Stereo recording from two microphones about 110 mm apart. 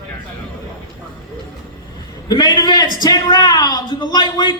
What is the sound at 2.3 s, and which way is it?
A man's voice, 40° left (ahead or behind).